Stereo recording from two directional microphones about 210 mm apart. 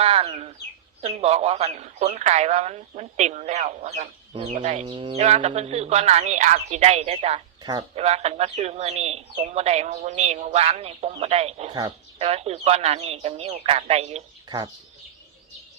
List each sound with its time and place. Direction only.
0.0 s chicken: 30° right (ahead or behind)
1.0 s speech: 30° right (ahead or behind)
11.7 s speech: 20° right (ahead or behind)